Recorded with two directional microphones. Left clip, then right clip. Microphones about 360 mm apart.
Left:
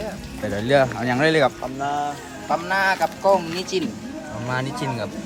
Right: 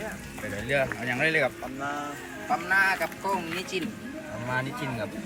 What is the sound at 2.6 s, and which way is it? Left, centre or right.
Speech, centre.